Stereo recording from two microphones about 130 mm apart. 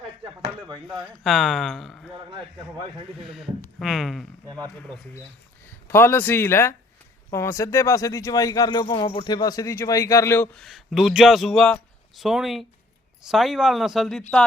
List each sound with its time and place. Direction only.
1.2 s a man's voice: centre (ahead or behind)
3.2 s a man's voice: centre (ahead or behind); by 10.5 s 20° left (ahead or behind)
10.5 s a man's voice: centre (ahead or behind)